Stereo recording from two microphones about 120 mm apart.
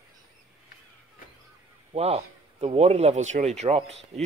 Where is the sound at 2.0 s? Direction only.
60° right (ahead or behind).